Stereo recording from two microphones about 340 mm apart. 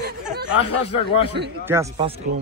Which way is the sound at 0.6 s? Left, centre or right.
Centre.